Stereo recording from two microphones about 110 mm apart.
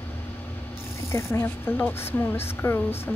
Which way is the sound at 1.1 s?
20° left (ahead or behind).